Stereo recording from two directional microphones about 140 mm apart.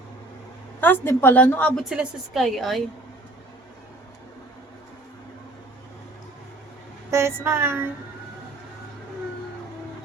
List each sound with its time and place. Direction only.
0.8 s a woman's voice: 15° left (ahead or behind)
1.8 s a woman's voice: 5° right (ahead or behind)
7.1 s a sound: 20° right (ahead or behind)